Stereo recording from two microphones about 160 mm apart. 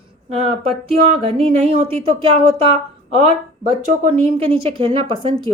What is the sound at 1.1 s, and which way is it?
A woman's voice, 40° right (ahead or behind).